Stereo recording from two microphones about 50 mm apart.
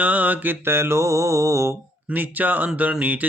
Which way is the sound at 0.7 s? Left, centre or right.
Right.